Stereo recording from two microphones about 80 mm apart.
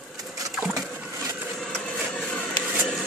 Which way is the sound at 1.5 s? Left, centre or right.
Centre.